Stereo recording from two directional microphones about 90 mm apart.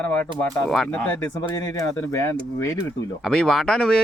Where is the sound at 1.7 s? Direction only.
35° left (ahead or behind).